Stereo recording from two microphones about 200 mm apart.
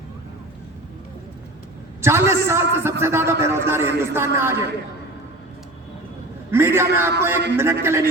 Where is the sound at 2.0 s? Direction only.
15° right (ahead or behind).